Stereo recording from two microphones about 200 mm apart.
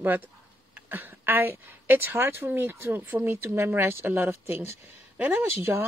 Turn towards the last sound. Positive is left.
turn(degrees=-10)  # may be behind; listen again after turning